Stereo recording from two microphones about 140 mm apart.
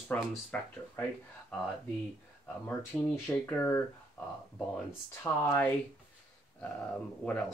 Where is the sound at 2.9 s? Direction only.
5° left (ahead or behind).